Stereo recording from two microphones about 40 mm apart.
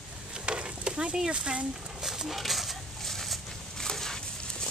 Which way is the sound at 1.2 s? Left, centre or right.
Right.